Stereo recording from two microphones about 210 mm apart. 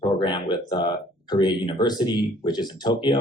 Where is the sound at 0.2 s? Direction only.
20° left (ahead or behind).